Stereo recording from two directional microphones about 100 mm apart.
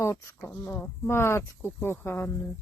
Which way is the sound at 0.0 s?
25° left (ahead or behind).